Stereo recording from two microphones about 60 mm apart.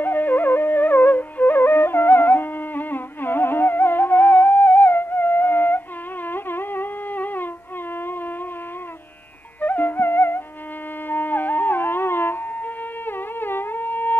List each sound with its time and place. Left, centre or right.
0.0 s music: left
9.6 s music: left